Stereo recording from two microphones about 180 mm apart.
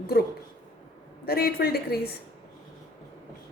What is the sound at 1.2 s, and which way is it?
Speech, 60° left (ahead or behind).